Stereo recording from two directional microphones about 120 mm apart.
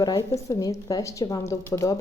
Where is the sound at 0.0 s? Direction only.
30° left (ahead or behind).